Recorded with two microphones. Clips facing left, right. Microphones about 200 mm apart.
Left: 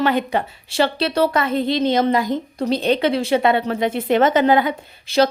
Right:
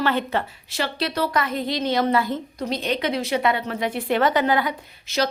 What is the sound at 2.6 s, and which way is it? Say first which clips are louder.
A woman's voice: left 7 dB; 30° left (ahead or behind).